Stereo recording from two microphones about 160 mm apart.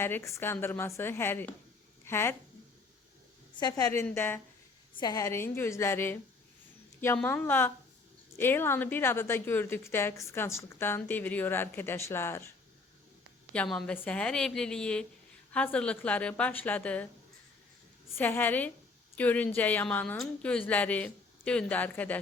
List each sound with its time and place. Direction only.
0.0 s a woman's voice: 15° left (ahead or behind)
3.5 s a woman's voice: 25° left (ahead or behind)
7.2 s a woman's voice: 10° left (ahead or behind)
13.5 s a woman's voice: 5° left (ahead or behind)
18.2 s a woman's voice: 10° left (ahead or behind)